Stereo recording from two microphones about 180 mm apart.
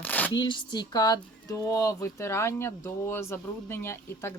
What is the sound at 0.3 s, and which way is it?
Speech, 25° left (ahead or behind).